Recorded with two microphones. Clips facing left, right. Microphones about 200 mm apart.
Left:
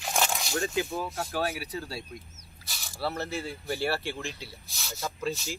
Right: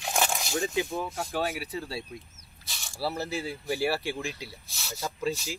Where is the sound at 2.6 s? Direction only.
Centre (ahead or behind).